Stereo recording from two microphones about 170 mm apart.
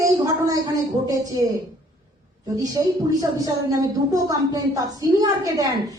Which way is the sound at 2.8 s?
20° right (ahead or behind).